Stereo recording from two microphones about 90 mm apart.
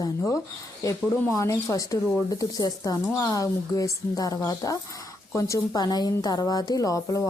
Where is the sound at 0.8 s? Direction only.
35° left (ahead or behind).